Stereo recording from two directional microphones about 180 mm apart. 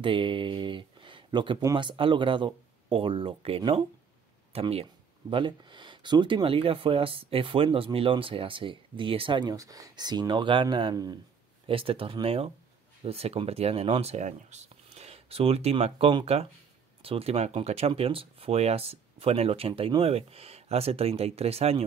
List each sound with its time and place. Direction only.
0.0 s speech: 30° right (ahead or behind)